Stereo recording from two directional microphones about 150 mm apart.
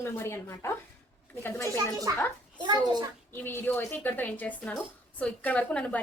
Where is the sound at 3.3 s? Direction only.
15° left (ahead or behind).